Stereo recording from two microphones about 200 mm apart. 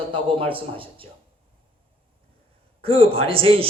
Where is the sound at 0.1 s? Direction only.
25° right (ahead or behind).